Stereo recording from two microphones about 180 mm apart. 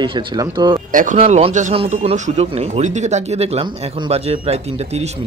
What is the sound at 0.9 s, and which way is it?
Speech, 45° right (ahead or behind).